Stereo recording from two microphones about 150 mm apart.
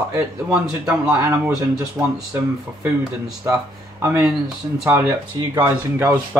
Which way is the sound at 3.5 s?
15° right (ahead or behind).